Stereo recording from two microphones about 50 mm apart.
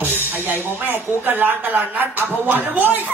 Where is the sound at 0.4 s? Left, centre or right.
Right.